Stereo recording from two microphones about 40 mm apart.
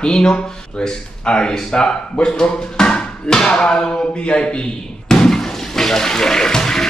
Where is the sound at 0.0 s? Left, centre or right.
Left.